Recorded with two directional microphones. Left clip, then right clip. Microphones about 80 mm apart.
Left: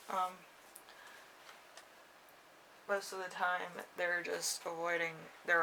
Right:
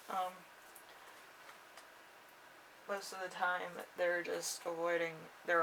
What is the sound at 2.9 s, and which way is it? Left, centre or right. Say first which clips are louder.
Speech: left 4 dB; left.